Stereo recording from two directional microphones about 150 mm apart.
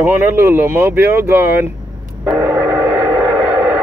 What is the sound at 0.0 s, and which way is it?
Speech, 15° right (ahead or behind).